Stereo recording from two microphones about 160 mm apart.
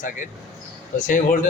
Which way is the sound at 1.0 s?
50° left (ahead or behind).